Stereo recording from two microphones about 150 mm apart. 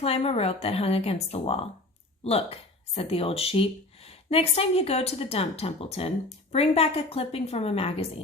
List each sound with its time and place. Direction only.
0.0 s speech: 40° left (ahead or behind)